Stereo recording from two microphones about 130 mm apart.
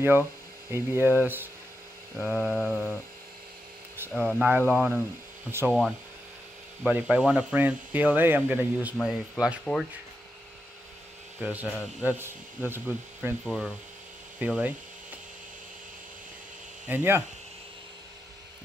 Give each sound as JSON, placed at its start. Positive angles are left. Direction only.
{"t": 0.7, "sound": "speech", "side_deg": -20}
{"t": 2.1, "sound": "a sound", "side_deg": -5}
{"t": 4.1, "sound": "a sound", "side_deg": 0}
{"t": 4.5, "sound": "speech", "side_deg": -15}
{"t": 5.7, "sound": "a sound", "side_deg": 0}
{"t": 6.9, "sound": "speech", "side_deg": -10}
{"t": 8.9, "sound": "speech", "side_deg": 10}
{"t": 11.4, "sound": "speech", "side_deg": -10}
{"t": 16.8, "sound": "speech", "side_deg": -15}